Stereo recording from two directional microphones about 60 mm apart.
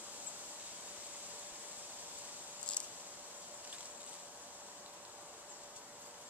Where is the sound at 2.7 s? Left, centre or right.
Centre.